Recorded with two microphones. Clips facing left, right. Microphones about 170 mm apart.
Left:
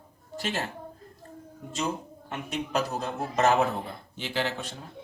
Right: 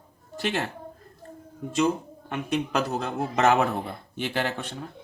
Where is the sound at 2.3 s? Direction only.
60° right (ahead or behind).